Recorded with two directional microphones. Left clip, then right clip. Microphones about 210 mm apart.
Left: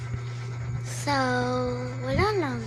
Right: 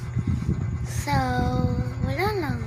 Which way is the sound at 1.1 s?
5° right (ahead or behind).